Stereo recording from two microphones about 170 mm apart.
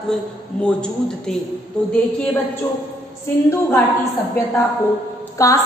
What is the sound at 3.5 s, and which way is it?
Speech, 10° left (ahead or behind).